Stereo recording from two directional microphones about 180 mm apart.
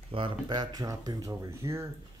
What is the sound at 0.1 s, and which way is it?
Speech, 25° right (ahead or behind).